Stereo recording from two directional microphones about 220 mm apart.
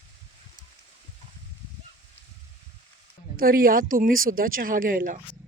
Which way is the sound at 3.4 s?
40° right (ahead or behind).